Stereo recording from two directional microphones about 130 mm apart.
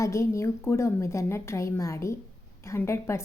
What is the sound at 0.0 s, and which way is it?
A woman's voice, 25° left (ahead or behind).